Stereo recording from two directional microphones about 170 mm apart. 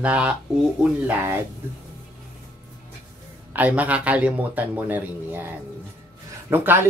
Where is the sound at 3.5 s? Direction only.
10° right (ahead or behind).